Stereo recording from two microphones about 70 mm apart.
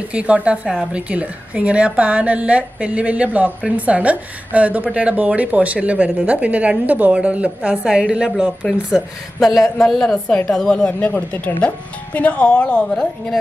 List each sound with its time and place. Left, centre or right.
0.1 s a woman's voice: centre
9.8 s speech: centre